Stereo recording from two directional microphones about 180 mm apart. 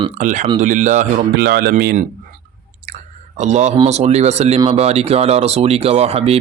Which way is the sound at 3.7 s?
35° right (ahead or behind).